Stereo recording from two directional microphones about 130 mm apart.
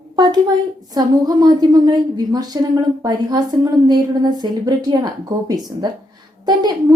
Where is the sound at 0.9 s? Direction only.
30° right (ahead or behind).